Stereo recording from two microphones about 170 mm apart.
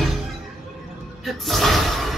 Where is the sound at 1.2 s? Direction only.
Centre (ahead or behind).